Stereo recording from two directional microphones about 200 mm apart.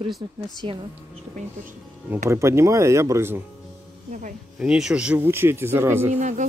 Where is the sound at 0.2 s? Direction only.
25° right (ahead or behind).